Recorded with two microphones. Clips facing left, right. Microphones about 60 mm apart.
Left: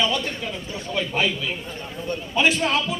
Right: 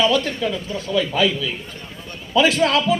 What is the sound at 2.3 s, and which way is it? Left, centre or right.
Speech, right.